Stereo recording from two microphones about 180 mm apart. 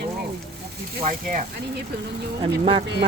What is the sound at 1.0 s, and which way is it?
Speech, 45° right (ahead or behind).